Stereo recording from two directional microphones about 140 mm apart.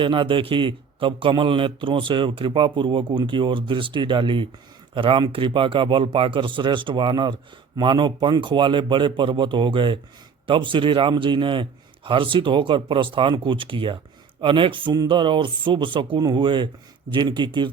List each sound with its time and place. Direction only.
0.0 s speech: 35° right (ahead or behind)